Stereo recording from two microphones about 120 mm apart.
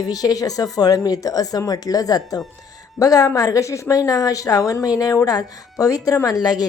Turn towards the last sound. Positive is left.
turn(degrees=30)  # may be behind; listen again after turning